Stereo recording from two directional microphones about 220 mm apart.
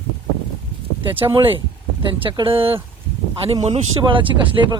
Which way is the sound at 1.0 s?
20° right (ahead or behind).